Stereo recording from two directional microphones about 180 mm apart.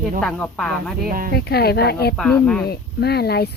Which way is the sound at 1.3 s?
60° left (ahead or behind).